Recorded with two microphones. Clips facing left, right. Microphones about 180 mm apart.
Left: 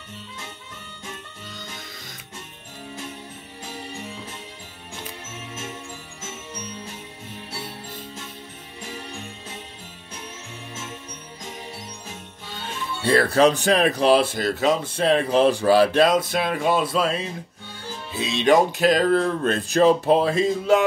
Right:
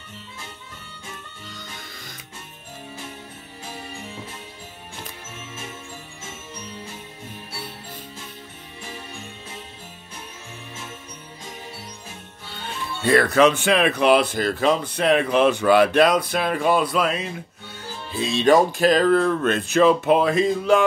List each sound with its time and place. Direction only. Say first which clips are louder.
13.0 s speech: right 1 dB; 30° left (ahead or behind)
18.3 s speech: right 1 dB; 20° left (ahead or behind)
18.8 s speech: right 1 dB; 50° right (ahead or behind)
19.0 s speech: right 2 dB; 30° left (ahead or behind)